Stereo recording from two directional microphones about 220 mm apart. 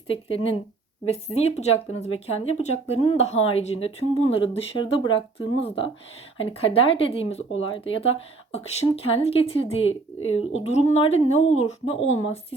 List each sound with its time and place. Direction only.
0.1 s speech: 25° left (ahead or behind)
9.8 s speech: 65° left (ahead or behind)
10.6 s speech: 30° left (ahead or behind)